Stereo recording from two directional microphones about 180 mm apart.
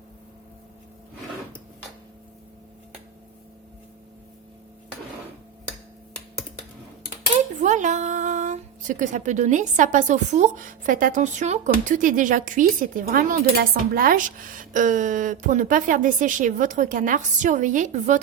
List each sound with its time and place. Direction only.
7.5 s a woman's voice: 45° right (ahead or behind)